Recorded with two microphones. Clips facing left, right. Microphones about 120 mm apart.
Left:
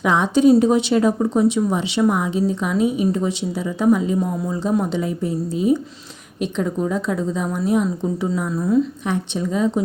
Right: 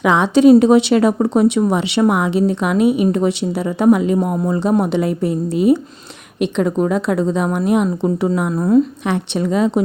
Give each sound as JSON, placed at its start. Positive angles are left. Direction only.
{"t": 0.0, "sound": "speech", "side_deg": -90}
{"t": 9.0, "sound": "speech", "side_deg": -70}